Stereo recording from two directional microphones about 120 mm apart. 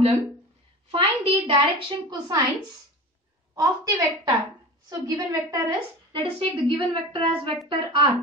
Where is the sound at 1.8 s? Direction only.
40° right (ahead or behind).